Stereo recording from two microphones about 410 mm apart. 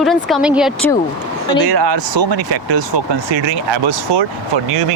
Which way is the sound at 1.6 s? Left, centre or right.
Right.